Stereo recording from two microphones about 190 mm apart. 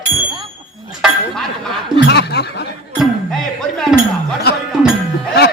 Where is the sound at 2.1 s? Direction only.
60° left (ahead or behind).